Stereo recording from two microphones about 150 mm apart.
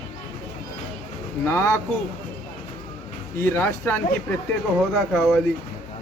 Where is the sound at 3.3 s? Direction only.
15° left (ahead or behind).